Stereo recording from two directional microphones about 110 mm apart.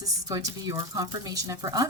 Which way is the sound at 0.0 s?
30° right (ahead or behind).